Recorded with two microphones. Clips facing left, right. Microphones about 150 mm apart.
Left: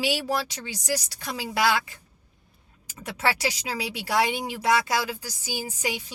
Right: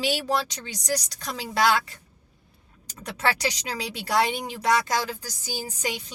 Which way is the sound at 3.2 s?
10° left (ahead or behind).